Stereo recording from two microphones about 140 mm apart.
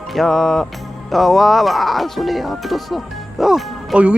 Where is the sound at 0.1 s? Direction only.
Centre (ahead or behind).